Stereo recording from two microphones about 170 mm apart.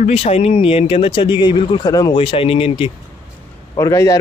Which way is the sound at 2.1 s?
35° left (ahead or behind).